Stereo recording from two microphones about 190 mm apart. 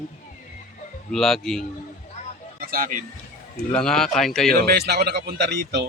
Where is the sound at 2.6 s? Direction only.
50° right (ahead or behind).